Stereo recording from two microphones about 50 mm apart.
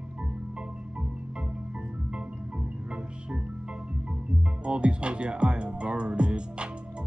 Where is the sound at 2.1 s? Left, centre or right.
Right.